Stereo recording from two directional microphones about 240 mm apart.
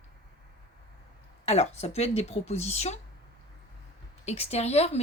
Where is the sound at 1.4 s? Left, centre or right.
Left.